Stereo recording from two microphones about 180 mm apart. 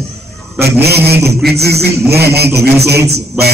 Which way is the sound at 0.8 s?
60° right (ahead or behind).